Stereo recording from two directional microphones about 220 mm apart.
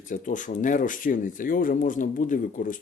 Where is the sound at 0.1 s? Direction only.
35° left (ahead or behind).